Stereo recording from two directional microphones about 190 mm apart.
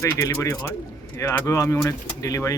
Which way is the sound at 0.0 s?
15° left (ahead or behind).